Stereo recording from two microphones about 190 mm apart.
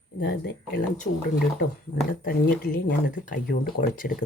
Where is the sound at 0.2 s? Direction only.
50° left (ahead or behind).